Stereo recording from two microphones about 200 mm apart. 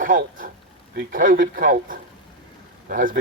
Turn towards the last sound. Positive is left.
turn(degrees=-45)  # may be behind; listen again after turning